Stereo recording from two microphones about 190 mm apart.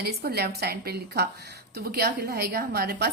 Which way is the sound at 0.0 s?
55° right (ahead or behind).